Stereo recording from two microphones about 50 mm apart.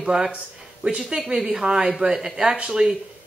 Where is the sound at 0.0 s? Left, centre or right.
Centre.